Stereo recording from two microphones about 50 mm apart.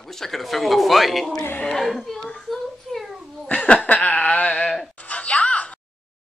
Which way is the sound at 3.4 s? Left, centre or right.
Left.